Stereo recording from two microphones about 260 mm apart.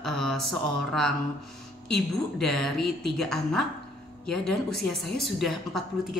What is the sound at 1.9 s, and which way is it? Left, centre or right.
A woman's voice, centre.